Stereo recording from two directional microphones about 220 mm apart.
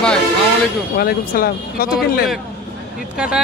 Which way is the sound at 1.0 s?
45° left (ahead or behind).